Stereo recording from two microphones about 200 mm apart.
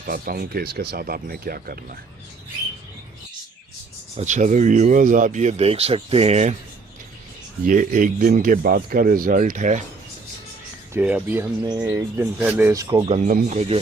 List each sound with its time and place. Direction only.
0.1 s a man's voice: 50° right (ahead or behind)
4.2 s speech: 40° right (ahead or behind)
7.7 s a man's voice: 40° right (ahead or behind)
10.9 s speech: 10° right (ahead or behind)
13.1 s speech: 35° right (ahead or behind)